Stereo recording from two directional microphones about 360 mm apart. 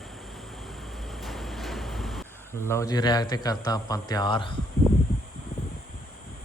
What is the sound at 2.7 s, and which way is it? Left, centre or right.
A man's voice, centre.